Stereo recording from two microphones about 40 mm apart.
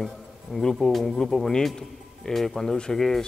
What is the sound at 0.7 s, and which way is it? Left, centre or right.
Speech, centre.